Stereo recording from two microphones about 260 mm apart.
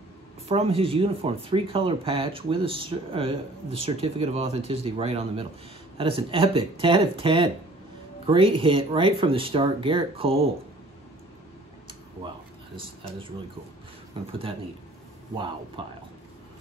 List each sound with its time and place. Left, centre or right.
0.5 s speech: right
14.2 s speech: centre
15.3 s speech: centre